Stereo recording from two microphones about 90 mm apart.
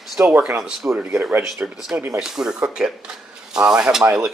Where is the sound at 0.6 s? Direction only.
10° right (ahead or behind).